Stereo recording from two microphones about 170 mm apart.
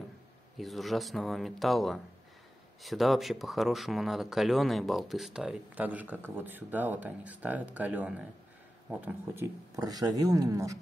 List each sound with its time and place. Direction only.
0.6 s speech: centre (ahead or behind); by 10.8 s 20° right (ahead or behind)